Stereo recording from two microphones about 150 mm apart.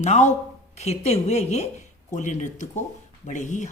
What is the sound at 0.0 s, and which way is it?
A woman's voice, 50° left (ahead or behind).